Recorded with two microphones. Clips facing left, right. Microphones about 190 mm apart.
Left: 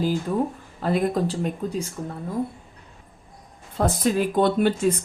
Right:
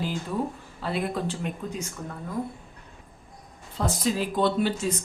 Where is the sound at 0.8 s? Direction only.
45° left (ahead or behind).